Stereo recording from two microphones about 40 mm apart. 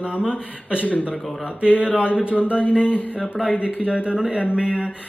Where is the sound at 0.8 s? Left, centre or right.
Left.